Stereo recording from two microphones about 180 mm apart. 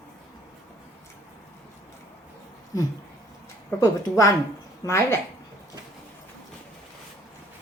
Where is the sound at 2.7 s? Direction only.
20° left (ahead or behind).